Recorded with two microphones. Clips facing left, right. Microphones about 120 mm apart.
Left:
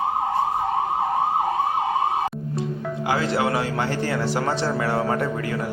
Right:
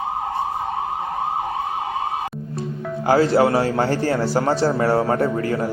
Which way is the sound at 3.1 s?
35° right (ahead or behind).